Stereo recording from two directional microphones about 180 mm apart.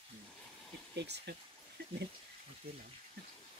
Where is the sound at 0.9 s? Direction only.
70° right (ahead or behind).